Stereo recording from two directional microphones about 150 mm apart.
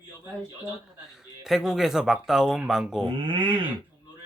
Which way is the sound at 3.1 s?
35° right (ahead or behind).